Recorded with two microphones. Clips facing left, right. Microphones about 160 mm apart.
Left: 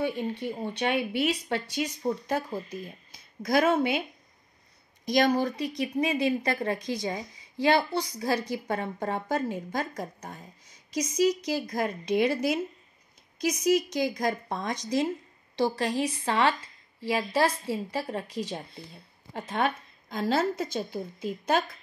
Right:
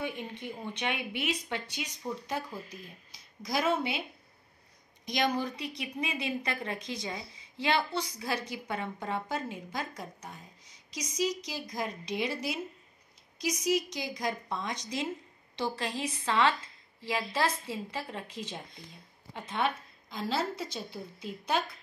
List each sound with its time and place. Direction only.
0.0 s speech: 35° left (ahead or behind); by 4.0 s 55° left (ahead or behind)
5.0 s a woman's voice: 45° left (ahead or behind)